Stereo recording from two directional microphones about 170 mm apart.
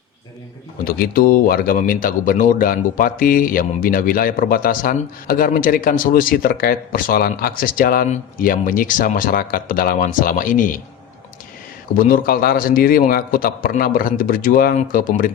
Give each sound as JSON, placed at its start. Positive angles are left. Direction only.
{"t": 0.9, "sound": "speech", "side_deg": 55}
{"t": 11.9, "sound": "speech", "side_deg": 55}